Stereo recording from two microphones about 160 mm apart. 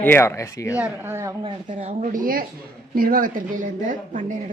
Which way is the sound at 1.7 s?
45° right (ahead or behind).